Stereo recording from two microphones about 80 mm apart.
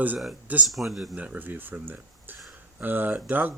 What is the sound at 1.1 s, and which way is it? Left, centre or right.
Speech, centre.